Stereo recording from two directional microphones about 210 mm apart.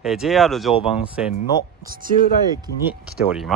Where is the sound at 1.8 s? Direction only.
45° right (ahead or behind).